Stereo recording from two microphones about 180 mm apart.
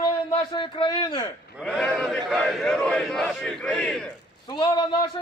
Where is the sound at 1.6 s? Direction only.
5° left (ahead or behind).